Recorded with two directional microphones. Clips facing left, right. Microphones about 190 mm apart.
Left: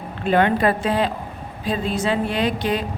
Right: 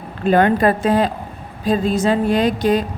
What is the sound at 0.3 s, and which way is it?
A woman's voice, 40° right (ahead or behind).